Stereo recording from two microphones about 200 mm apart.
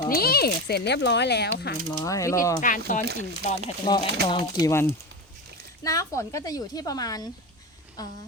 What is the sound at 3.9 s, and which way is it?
A woman's voice, 20° left (ahead or behind).